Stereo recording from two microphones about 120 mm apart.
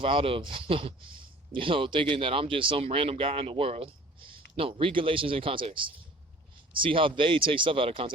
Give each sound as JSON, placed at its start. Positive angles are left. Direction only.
{"t": 0.0, "sound": "speech", "side_deg": -50}
{"t": 6.7, "sound": "speech", "side_deg": -45}